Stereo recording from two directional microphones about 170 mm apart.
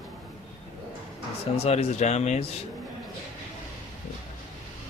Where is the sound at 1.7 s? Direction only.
40° left (ahead or behind).